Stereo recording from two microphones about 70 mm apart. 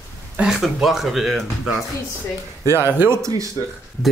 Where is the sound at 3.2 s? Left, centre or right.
Right.